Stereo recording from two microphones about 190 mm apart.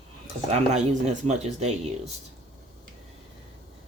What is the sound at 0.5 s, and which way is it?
Speech, 35° right (ahead or behind).